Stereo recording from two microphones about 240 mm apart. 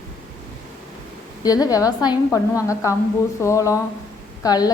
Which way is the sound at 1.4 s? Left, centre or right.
Centre.